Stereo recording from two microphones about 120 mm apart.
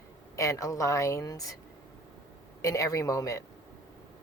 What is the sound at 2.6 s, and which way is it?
Speech, 30° left (ahead or behind).